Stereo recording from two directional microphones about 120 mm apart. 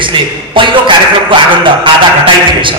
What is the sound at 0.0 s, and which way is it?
Speech, 45° right (ahead or behind).